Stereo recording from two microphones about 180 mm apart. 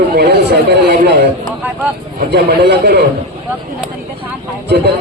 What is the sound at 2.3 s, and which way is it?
Speech, 70° right (ahead or behind).